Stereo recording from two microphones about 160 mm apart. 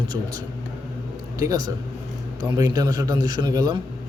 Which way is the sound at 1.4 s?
25° right (ahead or behind).